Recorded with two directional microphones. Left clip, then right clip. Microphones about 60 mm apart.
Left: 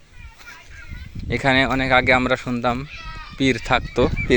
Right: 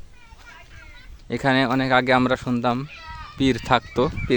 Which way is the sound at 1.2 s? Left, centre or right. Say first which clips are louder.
Left 3 dB; right.